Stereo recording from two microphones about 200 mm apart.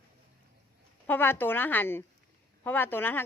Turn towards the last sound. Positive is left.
turn(degrees=10)  # may be behind; listen again after turning